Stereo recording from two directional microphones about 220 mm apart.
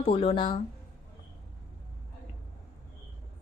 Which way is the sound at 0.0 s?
25° left (ahead or behind).